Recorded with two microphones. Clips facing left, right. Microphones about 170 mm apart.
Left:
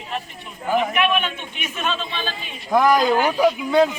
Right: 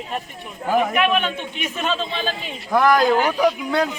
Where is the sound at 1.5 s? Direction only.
35° right (ahead or behind).